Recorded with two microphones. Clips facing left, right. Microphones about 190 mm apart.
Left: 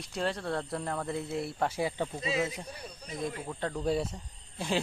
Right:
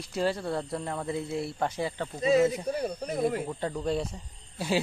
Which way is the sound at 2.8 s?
60° right (ahead or behind).